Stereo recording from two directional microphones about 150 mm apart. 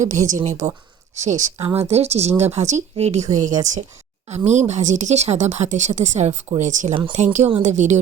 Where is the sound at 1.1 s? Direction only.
50° right (ahead or behind).